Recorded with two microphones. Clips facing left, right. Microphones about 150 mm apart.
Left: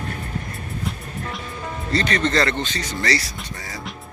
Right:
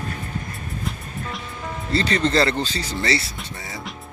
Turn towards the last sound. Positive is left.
turn(degrees=0)  # may be behind; listen again after turning